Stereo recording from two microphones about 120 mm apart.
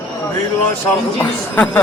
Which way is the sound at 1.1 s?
10° left (ahead or behind).